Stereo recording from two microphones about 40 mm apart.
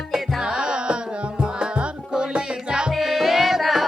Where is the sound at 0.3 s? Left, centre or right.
Right.